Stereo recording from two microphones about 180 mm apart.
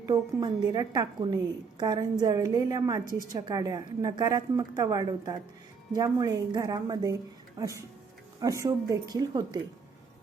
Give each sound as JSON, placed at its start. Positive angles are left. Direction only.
{"t": 0.0, "sound": "a woman's voice", "side_deg": -20}